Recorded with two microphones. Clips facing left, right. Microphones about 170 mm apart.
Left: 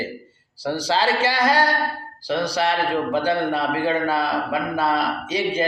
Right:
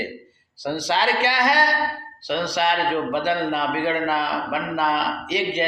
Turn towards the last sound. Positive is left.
turn(degrees=30)  # may be behind; listen again after turning